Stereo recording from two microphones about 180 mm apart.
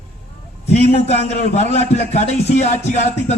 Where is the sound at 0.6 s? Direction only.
35° left (ahead or behind).